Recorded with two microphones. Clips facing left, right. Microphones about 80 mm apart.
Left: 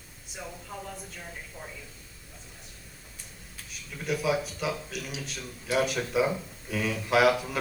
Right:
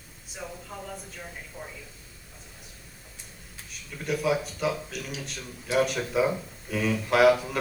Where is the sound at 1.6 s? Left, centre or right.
Centre.